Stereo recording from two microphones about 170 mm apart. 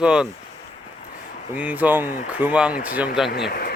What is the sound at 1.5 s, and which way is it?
Speech, 10° right (ahead or behind).